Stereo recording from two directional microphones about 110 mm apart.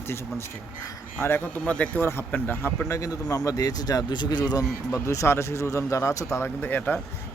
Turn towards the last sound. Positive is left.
turn(degrees=15)  # may be behind; listen again after turning